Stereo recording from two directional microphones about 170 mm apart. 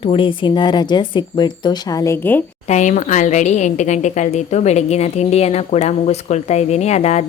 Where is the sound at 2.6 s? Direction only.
45° left (ahead or behind).